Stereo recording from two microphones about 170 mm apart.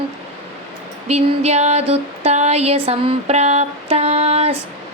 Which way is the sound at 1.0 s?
40° right (ahead or behind).